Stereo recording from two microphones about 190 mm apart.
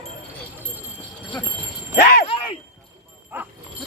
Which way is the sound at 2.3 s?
30° left (ahead or behind).